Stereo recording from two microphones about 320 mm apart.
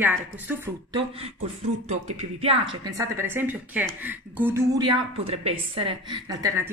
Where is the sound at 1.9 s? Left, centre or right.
Centre.